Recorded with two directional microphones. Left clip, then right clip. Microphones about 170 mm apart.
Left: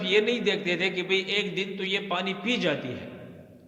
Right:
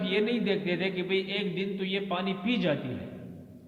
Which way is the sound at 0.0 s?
45° left (ahead or behind).